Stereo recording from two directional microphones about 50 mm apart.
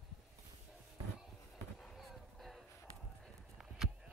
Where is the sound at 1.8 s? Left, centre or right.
Centre.